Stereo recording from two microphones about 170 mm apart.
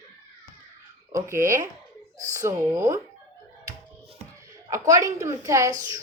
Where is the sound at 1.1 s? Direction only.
15° right (ahead or behind).